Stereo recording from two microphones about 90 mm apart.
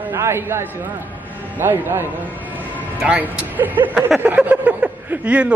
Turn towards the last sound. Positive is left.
turn(degrees=-15)  # may be behind; listen again after turning